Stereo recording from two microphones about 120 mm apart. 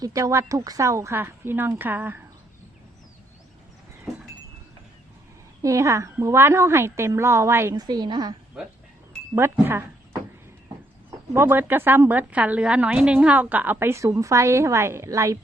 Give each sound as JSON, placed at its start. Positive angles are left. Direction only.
{"t": 0.0, "sound": "a woman's voice", "side_deg": -25}
{"t": 4.1, "sound": "a sound", "side_deg": 0}
{"t": 5.6, "sound": "a woman's voice", "side_deg": -25}
{"t": 7.8, "sound": "a woman's voice", "side_deg": -35}
{"t": 9.3, "sound": "speech", "side_deg": -20}
{"t": 11.3, "sound": "a woman's voice", "side_deg": -15}